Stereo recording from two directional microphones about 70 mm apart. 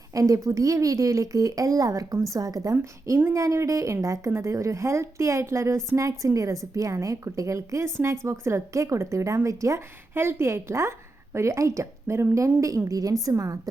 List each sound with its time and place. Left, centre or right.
0.1 s speech: right
3.3 s a woman's voice: right
10.2 s a woman's voice: right